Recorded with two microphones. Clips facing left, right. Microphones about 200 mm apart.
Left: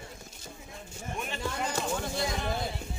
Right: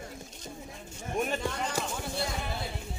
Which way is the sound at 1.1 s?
45° right (ahead or behind).